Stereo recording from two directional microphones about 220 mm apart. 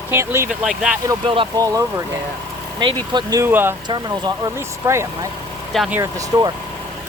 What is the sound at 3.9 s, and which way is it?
Speech, 20° right (ahead or behind).